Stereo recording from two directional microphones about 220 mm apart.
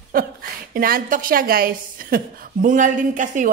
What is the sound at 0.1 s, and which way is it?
A woman's voice, 40° right (ahead or behind).